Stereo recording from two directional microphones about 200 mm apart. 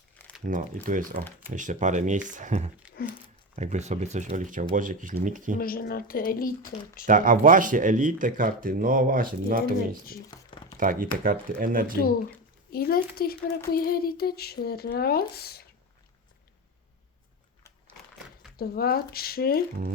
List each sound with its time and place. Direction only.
0.4 s speech: 40° right (ahead or behind)
3.0 s speech: 50° left (ahead or behind)
3.5 s speech: 35° right (ahead or behind)
5.5 s speech: 45° left (ahead or behind)
7.1 s speech: 40° right (ahead or behind)
10.8 s speech: 45° right (ahead or behind)
12.7 s speech: 50° left (ahead or behind)
18.5 s speech: 50° left (ahead or behind)